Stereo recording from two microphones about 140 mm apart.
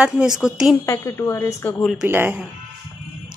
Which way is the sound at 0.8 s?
20° left (ahead or behind).